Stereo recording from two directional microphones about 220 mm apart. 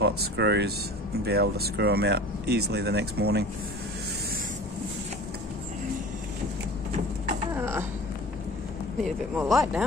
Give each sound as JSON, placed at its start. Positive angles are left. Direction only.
{"t": 0.0, "sound": "speech", "side_deg": -50}
{"t": 7.5, "sound": "a sound", "side_deg": -10}
{"t": 9.4, "sound": "speech", "side_deg": -5}